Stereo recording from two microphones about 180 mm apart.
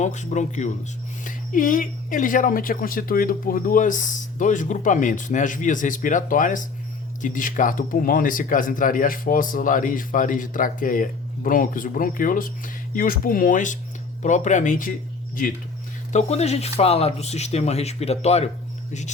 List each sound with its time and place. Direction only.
0.0 s speech: 40° left (ahead or behind)
16.1 s speech: 35° left (ahead or behind)